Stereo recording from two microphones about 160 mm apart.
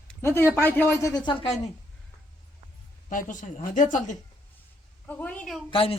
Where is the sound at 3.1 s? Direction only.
55° left (ahead or behind).